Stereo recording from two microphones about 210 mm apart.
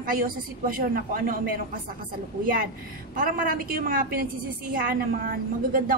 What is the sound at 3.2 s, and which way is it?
A woman's voice, 40° right (ahead or behind).